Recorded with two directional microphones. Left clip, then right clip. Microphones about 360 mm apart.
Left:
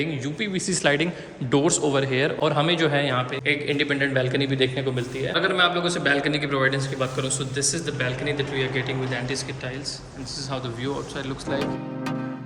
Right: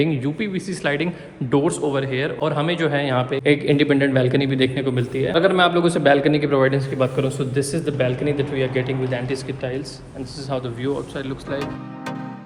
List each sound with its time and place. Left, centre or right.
0.0 s a man's voice: centre